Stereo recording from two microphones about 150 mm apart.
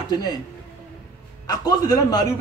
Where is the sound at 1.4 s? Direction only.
25° left (ahead or behind).